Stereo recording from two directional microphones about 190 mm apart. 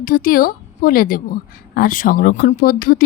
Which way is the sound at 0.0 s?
45° left (ahead or behind).